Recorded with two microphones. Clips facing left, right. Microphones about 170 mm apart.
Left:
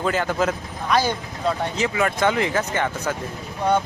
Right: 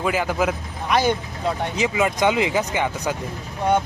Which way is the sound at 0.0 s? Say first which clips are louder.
Even; 5° right (ahead or behind).